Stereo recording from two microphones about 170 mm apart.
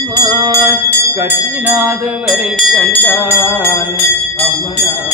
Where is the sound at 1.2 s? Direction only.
15° right (ahead or behind).